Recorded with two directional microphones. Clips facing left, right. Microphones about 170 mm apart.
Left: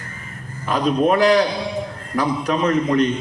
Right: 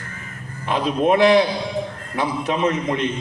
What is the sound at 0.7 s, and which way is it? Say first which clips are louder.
Speech: left 1 dB; 40° left (ahead or behind).